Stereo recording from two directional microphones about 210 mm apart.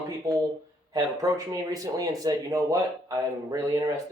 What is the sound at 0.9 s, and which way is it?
Speech, 15° right (ahead or behind).